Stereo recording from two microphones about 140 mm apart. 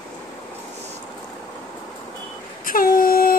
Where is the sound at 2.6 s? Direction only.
90° left.